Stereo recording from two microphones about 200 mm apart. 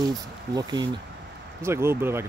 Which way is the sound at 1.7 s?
10° right (ahead or behind).